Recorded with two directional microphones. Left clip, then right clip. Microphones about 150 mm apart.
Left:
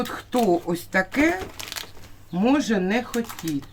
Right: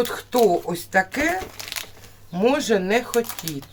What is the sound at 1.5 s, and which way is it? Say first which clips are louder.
Crumpling: right 2 dB; 5° left (ahead or behind).